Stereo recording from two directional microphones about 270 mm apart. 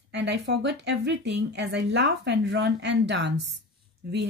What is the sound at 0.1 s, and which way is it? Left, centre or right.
A woman's voice, right.